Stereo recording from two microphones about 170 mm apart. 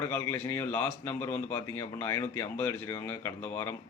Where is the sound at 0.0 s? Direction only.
15° left (ahead or behind).